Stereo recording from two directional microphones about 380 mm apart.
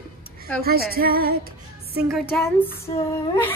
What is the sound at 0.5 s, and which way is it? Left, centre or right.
Music, centre.